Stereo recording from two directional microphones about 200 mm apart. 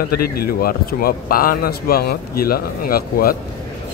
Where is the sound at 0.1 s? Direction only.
50° left (ahead or behind).